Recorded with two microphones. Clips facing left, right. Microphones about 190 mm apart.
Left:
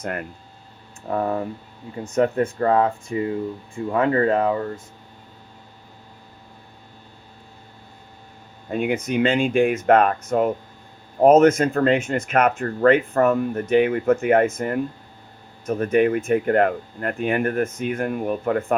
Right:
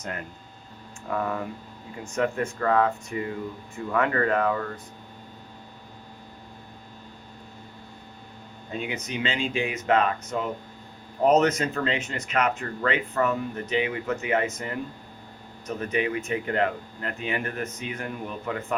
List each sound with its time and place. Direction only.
1.1 s speech: 35° left (ahead or behind)
8.7 s speech: 55° left (ahead or behind)